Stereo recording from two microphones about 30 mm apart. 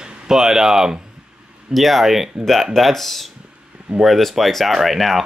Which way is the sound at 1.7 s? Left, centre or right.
Centre.